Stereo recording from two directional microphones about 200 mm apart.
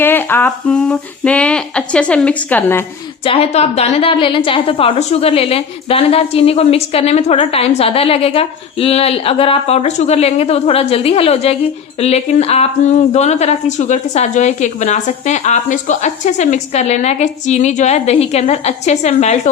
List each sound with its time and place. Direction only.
0.0 s speech: 10° left (ahead or behind)
3.2 s a woman's voice: 30° left (ahead or behind)